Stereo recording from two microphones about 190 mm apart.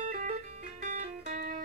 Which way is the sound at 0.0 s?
45° right (ahead or behind).